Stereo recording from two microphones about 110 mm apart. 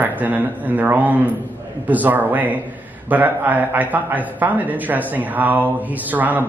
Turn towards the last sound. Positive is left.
turn(degrees=-15)  # may be behind; listen again after turning